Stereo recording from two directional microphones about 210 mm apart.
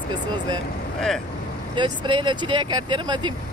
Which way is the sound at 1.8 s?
25° right (ahead or behind).